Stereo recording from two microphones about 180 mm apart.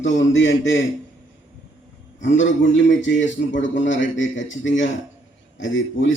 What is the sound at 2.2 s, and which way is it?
A man's voice, 90° left.